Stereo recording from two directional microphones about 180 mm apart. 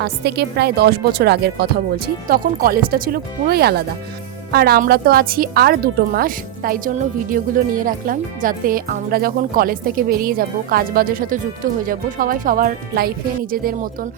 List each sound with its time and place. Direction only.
0.0 s a woman's voice: 65° right (ahead or behind)